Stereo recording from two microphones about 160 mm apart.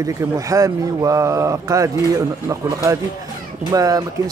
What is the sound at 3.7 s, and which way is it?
Speech, 20° right (ahead or behind).